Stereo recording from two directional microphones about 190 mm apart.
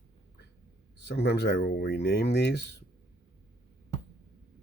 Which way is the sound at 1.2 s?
60° left (ahead or behind).